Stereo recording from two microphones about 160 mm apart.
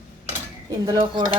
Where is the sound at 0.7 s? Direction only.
20° right (ahead or behind).